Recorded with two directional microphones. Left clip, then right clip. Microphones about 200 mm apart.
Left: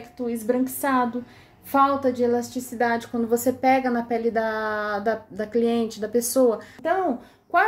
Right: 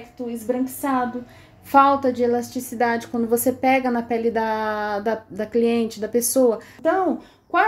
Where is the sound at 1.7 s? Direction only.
15° right (ahead or behind).